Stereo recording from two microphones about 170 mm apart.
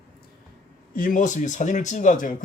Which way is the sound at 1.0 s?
50° left (ahead or behind).